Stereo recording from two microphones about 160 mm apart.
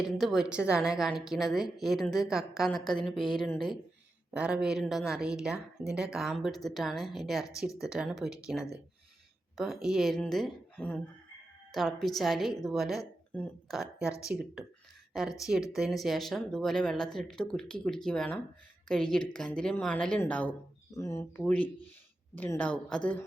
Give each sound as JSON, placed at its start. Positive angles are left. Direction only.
{"t": 0.0, "sound": "a woman's voice", "side_deg": 0}